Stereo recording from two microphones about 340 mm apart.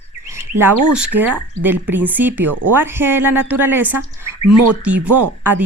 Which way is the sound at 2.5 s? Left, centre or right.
Right.